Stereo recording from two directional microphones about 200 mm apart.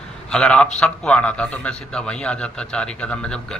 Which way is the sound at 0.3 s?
5° left (ahead or behind).